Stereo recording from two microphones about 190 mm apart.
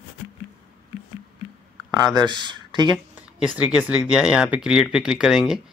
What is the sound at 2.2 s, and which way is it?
Speech, 25° right (ahead or behind).